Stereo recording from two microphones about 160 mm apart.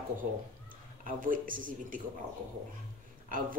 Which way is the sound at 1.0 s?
55° right (ahead or behind).